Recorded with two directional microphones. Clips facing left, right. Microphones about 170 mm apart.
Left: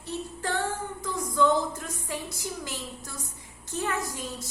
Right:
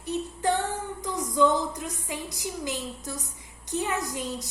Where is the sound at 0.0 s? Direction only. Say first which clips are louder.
Right 6 dB; 20° right (ahead or behind).